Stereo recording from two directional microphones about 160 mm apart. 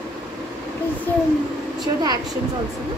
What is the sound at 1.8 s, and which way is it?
Speech, 25° right (ahead or behind).